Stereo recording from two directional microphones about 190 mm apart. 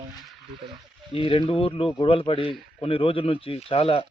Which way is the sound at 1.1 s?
30° left (ahead or behind).